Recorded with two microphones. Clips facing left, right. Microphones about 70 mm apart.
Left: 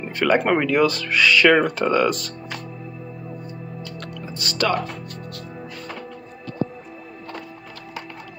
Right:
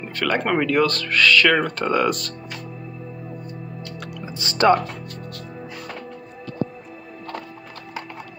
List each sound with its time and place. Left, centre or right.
0.0 s speech: centre
1.9 s speech: centre
4.4 s speech: right